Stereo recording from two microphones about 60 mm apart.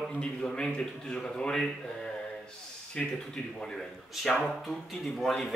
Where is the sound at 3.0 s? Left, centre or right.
Centre.